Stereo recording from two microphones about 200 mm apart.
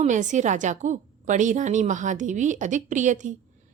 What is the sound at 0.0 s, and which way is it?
Speech, 40° right (ahead or behind).